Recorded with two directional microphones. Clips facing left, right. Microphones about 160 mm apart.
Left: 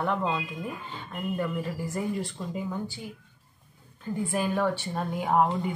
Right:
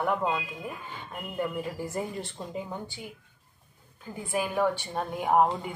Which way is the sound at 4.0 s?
10° right (ahead or behind).